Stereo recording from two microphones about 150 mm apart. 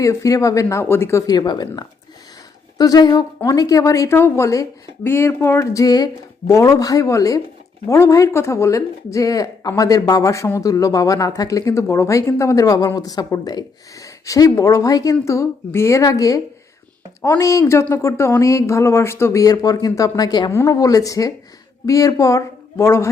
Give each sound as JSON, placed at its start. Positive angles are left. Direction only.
{"t": 0.0, "sound": "a woman's voice", "side_deg": 20}